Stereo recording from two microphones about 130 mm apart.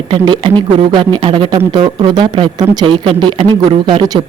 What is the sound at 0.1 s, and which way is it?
Speech, 40° right (ahead or behind).